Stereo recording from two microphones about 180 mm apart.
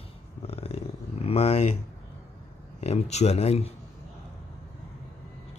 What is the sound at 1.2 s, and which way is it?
Speech, 35° left (ahead or behind).